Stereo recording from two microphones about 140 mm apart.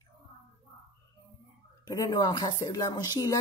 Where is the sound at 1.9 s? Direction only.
25° left (ahead or behind).